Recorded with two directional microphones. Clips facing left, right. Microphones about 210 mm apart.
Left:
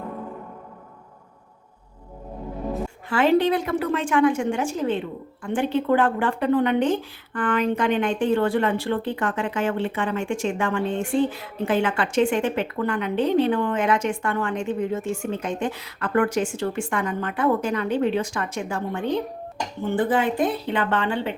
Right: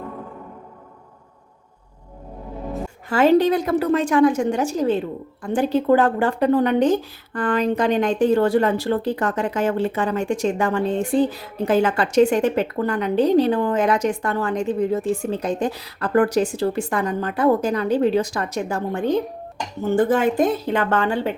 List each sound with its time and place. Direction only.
3.1 s a woman's voice: 40° right (ahead or behind)